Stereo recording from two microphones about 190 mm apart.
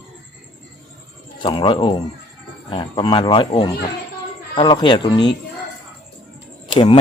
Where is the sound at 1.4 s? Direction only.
25° left (ahead or behind).